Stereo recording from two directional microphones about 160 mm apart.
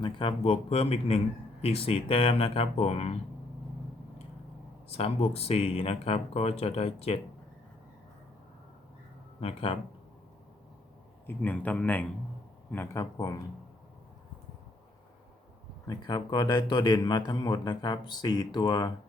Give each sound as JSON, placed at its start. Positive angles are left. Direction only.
{"t": 0.0, "sound": "speech", "side_deg": 35}
{"t": 4.9, "sound": "speech", "side_deg": 40}
{"t": 9.4, "sound": "speech", "side_deg": 35}
{"t": 11.3, "sound": "a man's voice", "side_deg": 10}
{"t": 15.9, "sound": "a man's voice", "side_deg": 25}